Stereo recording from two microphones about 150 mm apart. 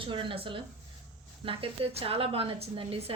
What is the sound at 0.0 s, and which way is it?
A woman's voice, 35° right (ahead or behind).